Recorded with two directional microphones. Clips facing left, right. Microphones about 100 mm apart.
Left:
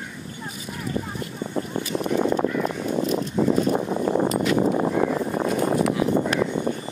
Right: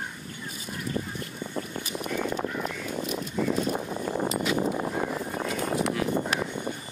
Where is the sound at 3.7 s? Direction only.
80° left.